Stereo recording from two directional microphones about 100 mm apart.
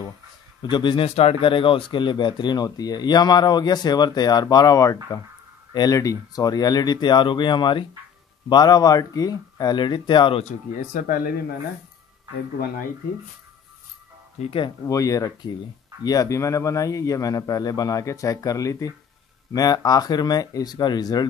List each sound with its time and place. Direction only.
0.6 s a man's voice: 50° left (ahead or behind)
1.0 s speech: 90° left; by 10.3 s 50° left (ahead or behind)
14.4 s speech: 60° left (ahead or behind)
14.9 s a man's voice: 35° left (ahead or behind)